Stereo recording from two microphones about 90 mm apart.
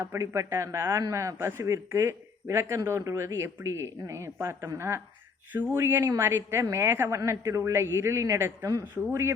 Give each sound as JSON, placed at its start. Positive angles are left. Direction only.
{"t": 0.0, "sound": "a man's voice", "side_deg": -30}